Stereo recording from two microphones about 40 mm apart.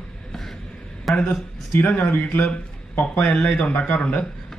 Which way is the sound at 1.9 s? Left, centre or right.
Left.